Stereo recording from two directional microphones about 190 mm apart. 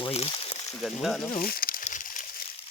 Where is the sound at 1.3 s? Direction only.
50° left (ahead or behind).